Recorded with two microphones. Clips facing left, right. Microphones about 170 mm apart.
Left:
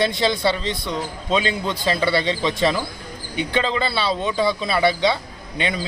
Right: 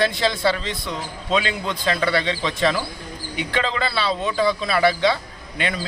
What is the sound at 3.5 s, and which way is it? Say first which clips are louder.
Speech: left 2 dB; 30° left (ahead or behind).